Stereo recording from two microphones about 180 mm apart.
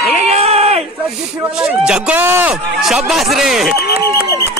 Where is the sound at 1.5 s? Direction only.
5° right (ahead or behind).